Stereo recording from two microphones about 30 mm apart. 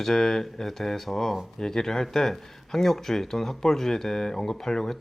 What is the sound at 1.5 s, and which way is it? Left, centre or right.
Speech, centre.